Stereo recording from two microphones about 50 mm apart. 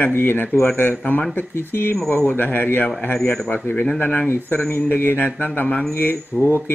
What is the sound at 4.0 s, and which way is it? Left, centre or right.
Speech, left.